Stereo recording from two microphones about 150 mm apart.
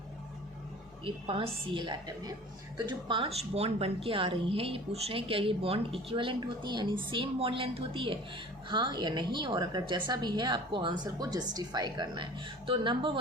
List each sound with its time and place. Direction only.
1.0 s a woman's voice: 35° right (ahead or behind)